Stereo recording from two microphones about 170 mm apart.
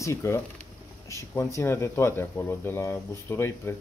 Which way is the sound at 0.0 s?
15° left (ahead or behind).